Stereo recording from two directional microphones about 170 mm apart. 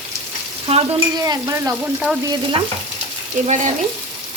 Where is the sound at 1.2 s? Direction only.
20° right (ahead or behind).